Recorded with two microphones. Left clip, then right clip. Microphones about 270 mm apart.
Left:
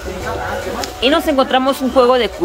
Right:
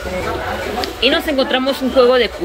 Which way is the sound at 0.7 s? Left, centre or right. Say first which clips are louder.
Left 1 dB; centre.